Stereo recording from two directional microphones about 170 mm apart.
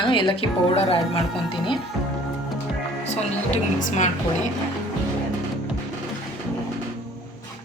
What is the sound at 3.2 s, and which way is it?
Speech, 45° left (ahead or behind).